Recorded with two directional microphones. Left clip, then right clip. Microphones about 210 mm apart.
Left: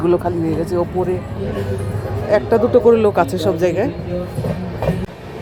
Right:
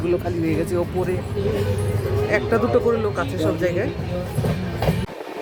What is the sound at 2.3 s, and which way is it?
Speech, 10° left (ahead or behind).